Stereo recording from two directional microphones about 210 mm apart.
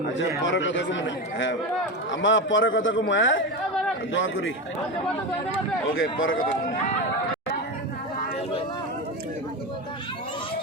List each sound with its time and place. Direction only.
0.2 s speech: 60° left (ahead or behind)
5.9 s speech: 70° left (ahead or behind)